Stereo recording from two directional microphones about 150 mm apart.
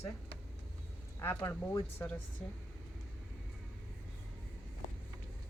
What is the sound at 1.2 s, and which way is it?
A woman's voice, 15° left (ahead or behind).